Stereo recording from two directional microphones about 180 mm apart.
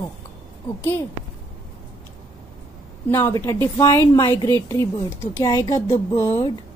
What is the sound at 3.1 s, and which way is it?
A woman's voice, 15° left (ahead or behind).